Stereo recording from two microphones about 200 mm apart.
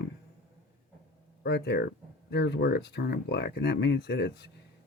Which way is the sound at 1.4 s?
55° left (ahead or behind).